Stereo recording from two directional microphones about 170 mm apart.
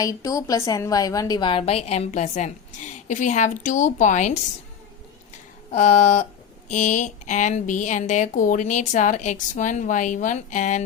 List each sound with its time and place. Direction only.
0.0 s a woman's voice: 20° left (ahead or behind); by 4.4 s 45° left (ahead or behind)
5.7 s speech: 45° left (ahead or behind)